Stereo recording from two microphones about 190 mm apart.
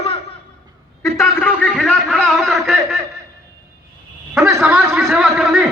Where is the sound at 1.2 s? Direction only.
10° left (ahead or behind).